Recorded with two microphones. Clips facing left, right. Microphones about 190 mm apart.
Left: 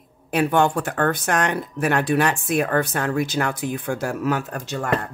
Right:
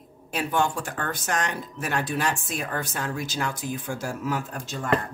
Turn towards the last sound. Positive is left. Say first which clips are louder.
# left 5 dB
turn(degrees=65)  # may be behind; listen again after turning